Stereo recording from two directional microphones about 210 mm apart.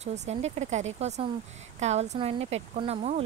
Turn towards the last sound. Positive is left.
turn(degrees=-35)  # may be behind; listen again after turning